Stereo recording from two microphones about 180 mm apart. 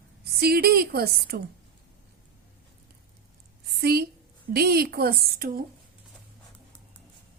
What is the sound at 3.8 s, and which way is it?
A woman's voice, 60° right (ahead or behind).